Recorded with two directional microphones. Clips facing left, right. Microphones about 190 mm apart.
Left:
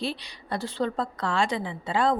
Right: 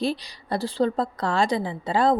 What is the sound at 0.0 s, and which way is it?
A woman's voice, 40° right (ahead or behind).